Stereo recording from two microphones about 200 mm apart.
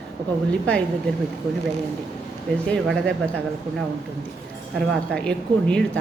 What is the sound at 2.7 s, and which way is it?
Speech, 5° left (ahead or behind).